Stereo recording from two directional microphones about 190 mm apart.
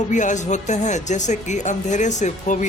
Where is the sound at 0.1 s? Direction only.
40° left (ahead or behind).